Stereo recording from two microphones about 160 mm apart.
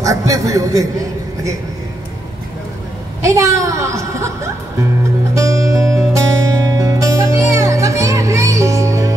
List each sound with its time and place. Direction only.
0.0 s a woman's voice: 20° right (ahead or behind)
3.2 s a woman's voice: 20° right (ahead or behind)
5.3 s music: 20° right (ahead or behind)